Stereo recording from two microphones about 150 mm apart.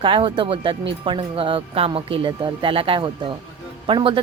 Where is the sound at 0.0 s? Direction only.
35° right (ahead or behind).